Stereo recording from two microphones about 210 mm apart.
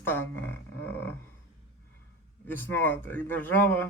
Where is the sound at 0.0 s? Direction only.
10° left (ahead or behind).